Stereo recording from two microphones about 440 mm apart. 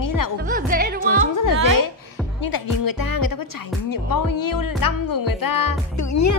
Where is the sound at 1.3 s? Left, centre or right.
Left.